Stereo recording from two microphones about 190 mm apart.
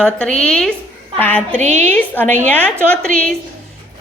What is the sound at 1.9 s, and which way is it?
Speech, 10° left (ahead or behind).